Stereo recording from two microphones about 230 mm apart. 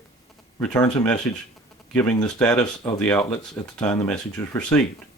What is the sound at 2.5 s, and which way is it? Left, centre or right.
Speech, centre.